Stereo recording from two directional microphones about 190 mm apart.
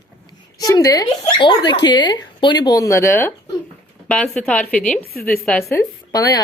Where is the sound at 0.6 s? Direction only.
20° left (ahead or behind); by 5.7 s 5° left (ahead or behind).